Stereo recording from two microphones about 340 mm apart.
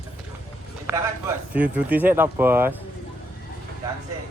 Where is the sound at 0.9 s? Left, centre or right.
Centre.